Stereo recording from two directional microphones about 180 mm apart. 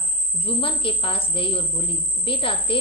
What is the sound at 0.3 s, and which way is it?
A woman's voice, 30° left (ahead or behind).